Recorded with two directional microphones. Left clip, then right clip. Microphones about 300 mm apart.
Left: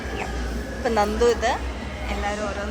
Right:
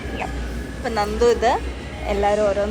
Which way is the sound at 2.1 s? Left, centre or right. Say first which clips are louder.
Right 9 dB; centre.